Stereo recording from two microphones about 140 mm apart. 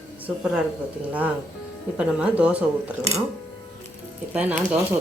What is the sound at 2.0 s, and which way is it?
Speech, 5° right (ahead or behind).